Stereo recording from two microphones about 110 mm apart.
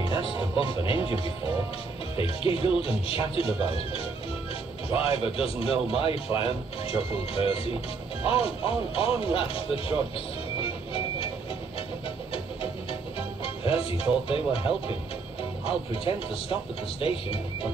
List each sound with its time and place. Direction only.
0.0 s speech: 45° left (ahead or behind)
10.6 s music: 55° left (ahead or behind)
13.4 s music: 60° left (ahead or behind)
14.2 s speech: 55° left (ahead or behind)